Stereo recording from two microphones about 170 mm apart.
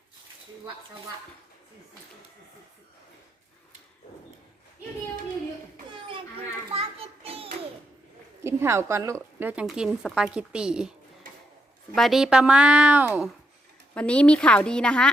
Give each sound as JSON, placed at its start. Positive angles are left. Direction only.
{"t": 6.7, "sound": "child singing", "side_deg": -35}
{"t": 8.4, "sound": "a woman's voice", "side_deg": -15}
{"t": 11.9, "sound": "a woman's voice", "side_deg": 0}
{"t": 13.9, "sound": "a woman's voice", "side_deg": 5}